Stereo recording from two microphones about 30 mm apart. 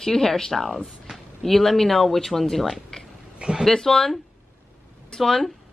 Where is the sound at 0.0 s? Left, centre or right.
Centre.